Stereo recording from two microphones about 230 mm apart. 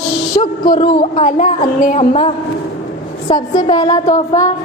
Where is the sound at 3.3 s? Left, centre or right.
Centre.